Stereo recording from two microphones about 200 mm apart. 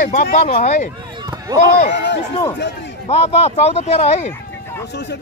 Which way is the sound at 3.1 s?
30° left (ahead or behind).